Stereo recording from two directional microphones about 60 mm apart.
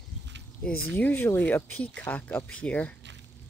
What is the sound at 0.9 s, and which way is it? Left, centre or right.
Speech, left.